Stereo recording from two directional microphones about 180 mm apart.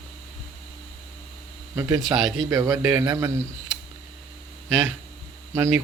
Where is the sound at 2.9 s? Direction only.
15° right (ahead or behind).